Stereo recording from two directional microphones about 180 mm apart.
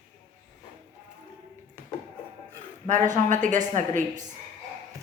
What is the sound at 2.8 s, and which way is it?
A woman's voice, 45° right (ahead or behind).